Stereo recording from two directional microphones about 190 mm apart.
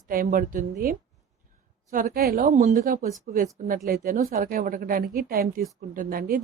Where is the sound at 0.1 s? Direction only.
45° right (ahead or behind).